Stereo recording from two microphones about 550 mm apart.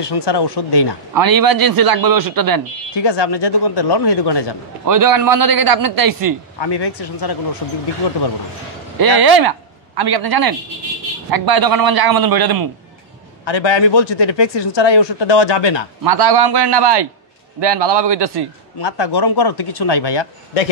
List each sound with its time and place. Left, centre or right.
0.0 s speech: left
1.1 s a man's voice: right
3.0 s speech: left
4.8 s a man's voice: right
6.6 s speech: left
8.9 s a man's voice: right
13.5 s speech: left
16.0 s a man's voice: right
18.8 s speech: left